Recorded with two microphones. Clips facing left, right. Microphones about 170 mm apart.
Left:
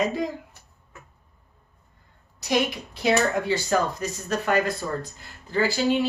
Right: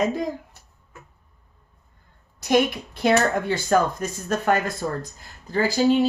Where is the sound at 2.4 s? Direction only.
50° right (ahead or behind).